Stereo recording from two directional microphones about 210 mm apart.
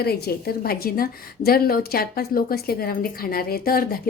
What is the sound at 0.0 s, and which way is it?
A woman's voice, 50° left (ahead or behind).